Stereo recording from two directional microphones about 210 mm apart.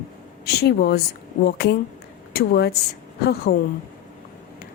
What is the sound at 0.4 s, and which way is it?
Speech, 50° left (ahead or behind).